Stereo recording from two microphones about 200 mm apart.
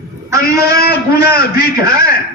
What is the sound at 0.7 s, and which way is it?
Speech, 50° left (ahead or behind).